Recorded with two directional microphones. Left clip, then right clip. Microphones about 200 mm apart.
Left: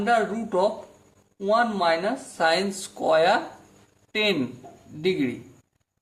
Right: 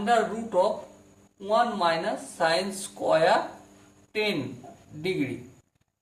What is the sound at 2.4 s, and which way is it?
Speech, 50° left (ahead or behind).